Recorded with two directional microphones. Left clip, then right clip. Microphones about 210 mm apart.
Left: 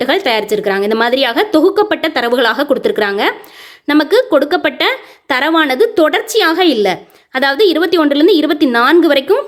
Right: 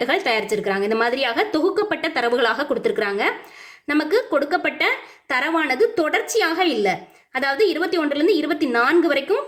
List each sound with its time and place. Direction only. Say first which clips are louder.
0.0 s speech: left 7 dB; 30° left (ahead or behind)